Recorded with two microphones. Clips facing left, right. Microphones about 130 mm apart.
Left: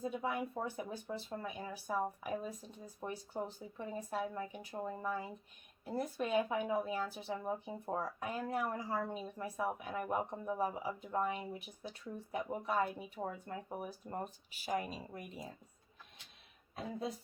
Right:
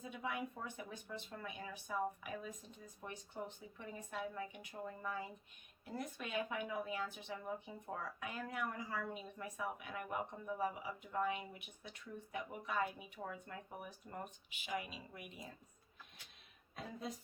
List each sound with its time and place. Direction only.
0.0 s speech: 35° left (ahead or behind)